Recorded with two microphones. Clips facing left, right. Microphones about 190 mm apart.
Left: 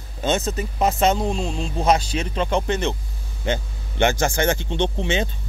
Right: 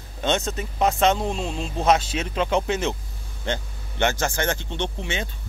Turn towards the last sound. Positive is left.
turn(degrees=25)  # may be behind; listen again after turning